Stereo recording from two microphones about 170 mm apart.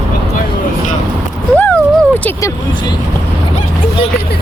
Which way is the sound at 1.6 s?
10° left (ahead or behind).